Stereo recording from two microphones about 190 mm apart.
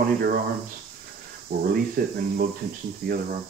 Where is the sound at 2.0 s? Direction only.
50° right (ahead or behind).